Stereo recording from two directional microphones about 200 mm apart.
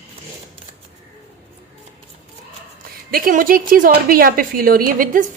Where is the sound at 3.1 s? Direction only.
45° right (ahead or behind).